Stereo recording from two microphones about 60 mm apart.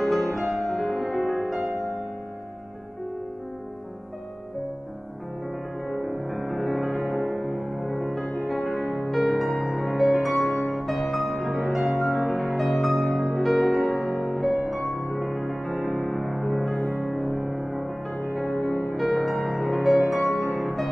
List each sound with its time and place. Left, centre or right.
0.0 s music: centre
6.0 s music: centre